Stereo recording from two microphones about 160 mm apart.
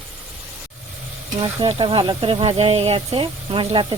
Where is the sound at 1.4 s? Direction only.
35° right (ahead or behind).